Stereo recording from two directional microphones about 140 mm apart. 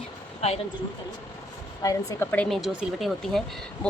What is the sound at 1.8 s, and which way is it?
Speech, 25° left (ahead or behind).